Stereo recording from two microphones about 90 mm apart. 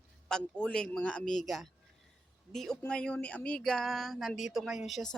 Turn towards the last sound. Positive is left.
turn(degrees=0)  # may be behind; listen again after turning